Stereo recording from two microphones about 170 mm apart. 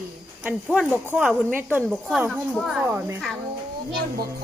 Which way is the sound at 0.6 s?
5° left (ahead or behind).